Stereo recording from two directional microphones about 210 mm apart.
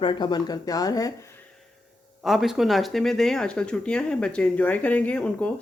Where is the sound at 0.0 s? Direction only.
20° left (ahead or behind).